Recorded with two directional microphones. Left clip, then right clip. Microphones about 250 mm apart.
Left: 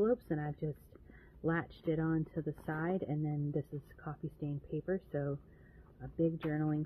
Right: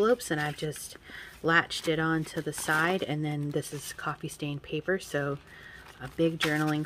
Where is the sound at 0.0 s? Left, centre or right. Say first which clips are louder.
Right 8 dB; centre.